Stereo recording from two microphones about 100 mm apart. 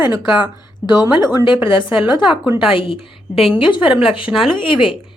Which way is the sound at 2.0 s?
50° left (ahead or behind).